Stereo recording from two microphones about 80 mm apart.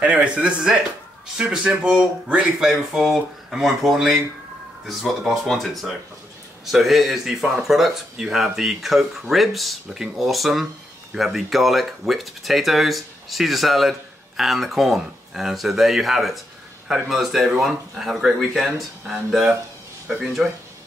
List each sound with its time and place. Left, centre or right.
0.0 s speech: centre